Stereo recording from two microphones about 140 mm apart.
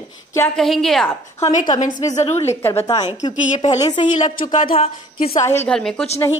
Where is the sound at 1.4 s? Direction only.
50° left (ahead or behind).